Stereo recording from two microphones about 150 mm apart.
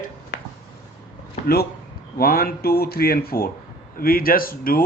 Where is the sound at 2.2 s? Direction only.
85° left.